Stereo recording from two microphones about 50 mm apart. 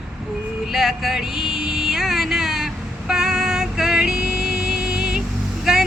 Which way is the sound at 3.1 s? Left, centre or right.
Centre.